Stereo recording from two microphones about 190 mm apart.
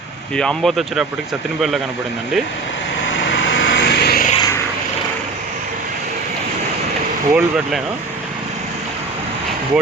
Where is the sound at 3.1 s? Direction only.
70° left (ahead or behind).